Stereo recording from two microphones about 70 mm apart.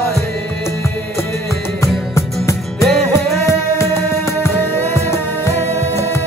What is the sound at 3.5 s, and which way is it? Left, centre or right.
Music, left.